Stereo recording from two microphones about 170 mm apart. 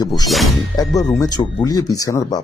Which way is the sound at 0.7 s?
20° left (ahead or behind).